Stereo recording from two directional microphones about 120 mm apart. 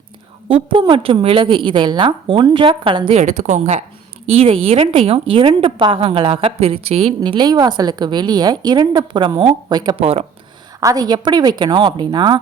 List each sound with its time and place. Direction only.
0.4 s a woman's voice: 45° right (ahead or behind)
3.2 s a woman's voice: 75° right (ahead or behind)
4.3 s a woman's voice: 55° right (ahead or behind)
7.2 s a woman's voice: 35° right (ahead or behind)
10.0 s a woman's voice: 55° right (ahead or behind)
10.8 s a woman's voice: 30° right (ahead or behind)